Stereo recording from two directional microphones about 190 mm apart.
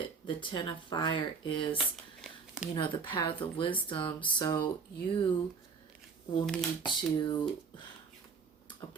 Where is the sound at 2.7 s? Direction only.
25° left (ahead or behind).